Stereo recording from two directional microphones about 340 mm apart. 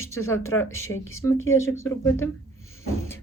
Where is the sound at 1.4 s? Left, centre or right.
Left.